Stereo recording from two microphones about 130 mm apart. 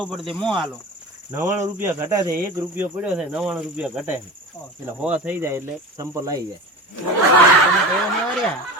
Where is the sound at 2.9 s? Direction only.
10° right (ahead or behind).